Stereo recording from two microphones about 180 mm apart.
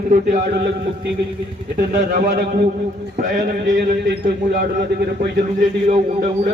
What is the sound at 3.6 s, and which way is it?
Speech, 60° right (ahead or behind).